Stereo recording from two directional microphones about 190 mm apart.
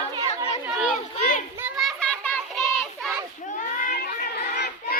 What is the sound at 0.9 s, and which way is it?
Children playing, 45° left (ahead or behind).